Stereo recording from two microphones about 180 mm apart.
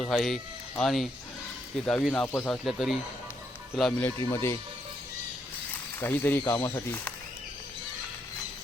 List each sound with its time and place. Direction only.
0.0 s speech: centre (ahead or behind)
4.2 s speech: 15° left (ahead or behind)
6.0 s speech: 10° left (ahead or behind)